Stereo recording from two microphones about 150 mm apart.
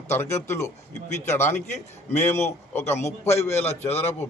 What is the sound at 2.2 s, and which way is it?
A man's voice, 15° left (ahead or behind).